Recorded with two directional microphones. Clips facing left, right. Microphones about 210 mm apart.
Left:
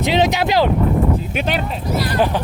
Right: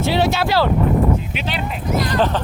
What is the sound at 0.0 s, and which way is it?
Speech, 20° left (ahead or behind).